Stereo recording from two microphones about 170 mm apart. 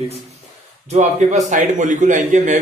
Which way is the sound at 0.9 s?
45° right (ahead or behind).